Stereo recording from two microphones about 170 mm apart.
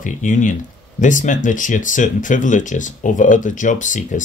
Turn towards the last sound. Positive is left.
turn(degrees=50)  # may be behind; listen again after turning